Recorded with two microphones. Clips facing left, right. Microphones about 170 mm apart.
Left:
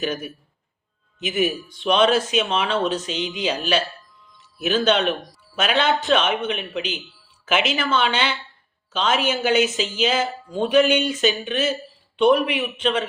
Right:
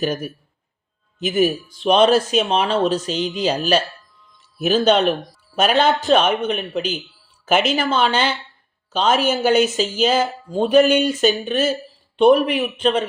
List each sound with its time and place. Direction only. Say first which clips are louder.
0.0 s a man's voice: right 4 dB; 40° right (ahead or behind)